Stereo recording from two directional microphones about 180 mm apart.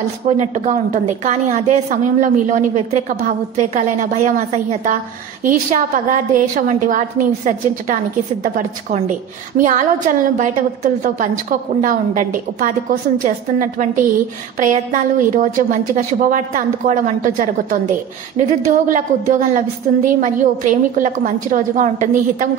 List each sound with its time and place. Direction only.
0.3 s a woman's voice: 40° right (ahead or behind)
5.4 s a woman's voice: 50° right (ahead or behind)
9.6 s a woman's voice: 45° right (ahead or behind)